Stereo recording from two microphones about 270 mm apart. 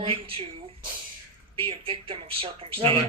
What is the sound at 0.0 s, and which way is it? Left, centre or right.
Speech, right.